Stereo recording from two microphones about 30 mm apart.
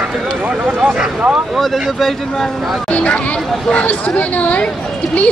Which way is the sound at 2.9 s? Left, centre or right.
Left.